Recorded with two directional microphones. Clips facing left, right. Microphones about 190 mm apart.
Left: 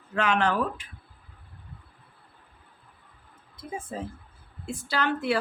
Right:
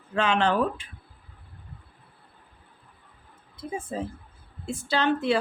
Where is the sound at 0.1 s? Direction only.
25° right (ahead or behind).